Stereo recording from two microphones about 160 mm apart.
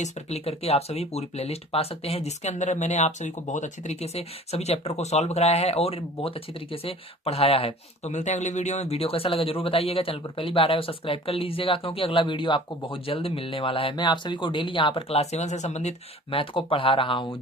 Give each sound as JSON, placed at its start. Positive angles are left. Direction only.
{"t": 0.0, "sound": "speech", "side_deg": 40}